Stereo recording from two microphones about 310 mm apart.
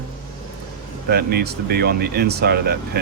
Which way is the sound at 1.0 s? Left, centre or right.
Right.